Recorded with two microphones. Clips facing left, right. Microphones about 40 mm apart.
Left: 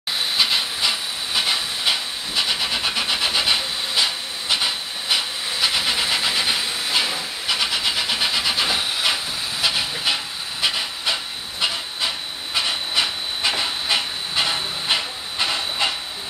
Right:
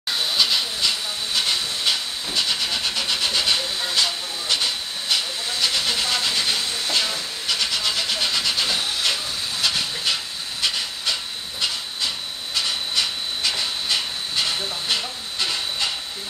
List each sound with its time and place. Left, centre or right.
0.4 s steam: left
11.6 s hiss: centre